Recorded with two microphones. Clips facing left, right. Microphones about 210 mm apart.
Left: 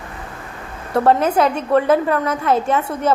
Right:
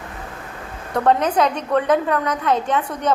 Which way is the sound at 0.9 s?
5° left (ahead or behind).